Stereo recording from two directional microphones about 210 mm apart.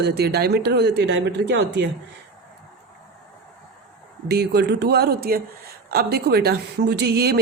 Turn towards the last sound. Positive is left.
turn(degrees=-50)  # may be behind; listen again after turning